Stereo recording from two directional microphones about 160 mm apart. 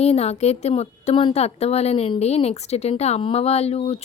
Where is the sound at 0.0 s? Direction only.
40° left (ahead or behind).